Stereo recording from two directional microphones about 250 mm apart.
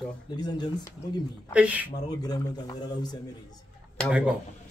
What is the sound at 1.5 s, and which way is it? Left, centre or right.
Speech, centre.